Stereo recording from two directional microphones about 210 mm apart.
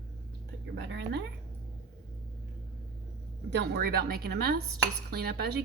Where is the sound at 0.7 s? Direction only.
55° right (ahead or behind).